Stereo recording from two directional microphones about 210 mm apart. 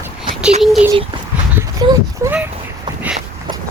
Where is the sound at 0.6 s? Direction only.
Centre (ahead or behind).